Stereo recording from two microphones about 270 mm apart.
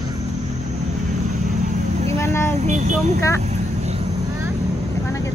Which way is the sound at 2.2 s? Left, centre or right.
Centre.